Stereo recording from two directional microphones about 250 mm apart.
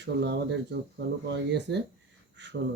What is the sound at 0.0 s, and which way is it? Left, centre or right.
Speech, right.